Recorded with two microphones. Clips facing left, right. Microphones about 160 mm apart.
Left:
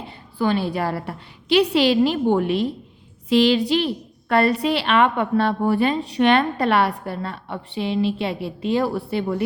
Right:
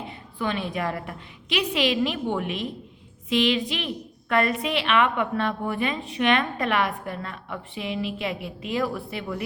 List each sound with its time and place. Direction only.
0.3 s a woman's voice: 35° left (ahead or behind)